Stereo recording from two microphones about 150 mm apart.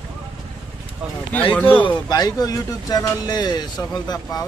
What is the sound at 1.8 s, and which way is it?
A man's voice, 25° left (ahead or behind).